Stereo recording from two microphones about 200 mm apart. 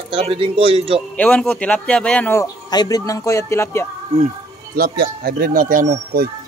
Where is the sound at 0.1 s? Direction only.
30° right (ahead or behind).